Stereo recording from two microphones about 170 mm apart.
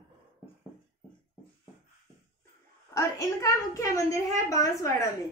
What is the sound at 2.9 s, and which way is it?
A woman's voice, 20° left (ahead or behind).